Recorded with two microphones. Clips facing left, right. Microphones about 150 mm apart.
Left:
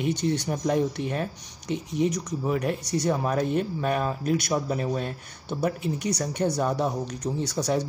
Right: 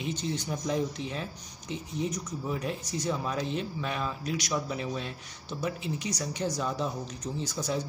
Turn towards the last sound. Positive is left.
turn(degrees=70)  # may be behind; listen again after turning